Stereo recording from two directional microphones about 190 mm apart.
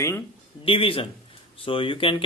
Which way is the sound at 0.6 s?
30° left (ahead or behind).